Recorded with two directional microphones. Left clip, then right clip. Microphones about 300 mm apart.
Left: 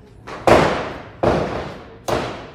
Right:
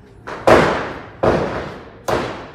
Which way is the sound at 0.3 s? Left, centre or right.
Centre.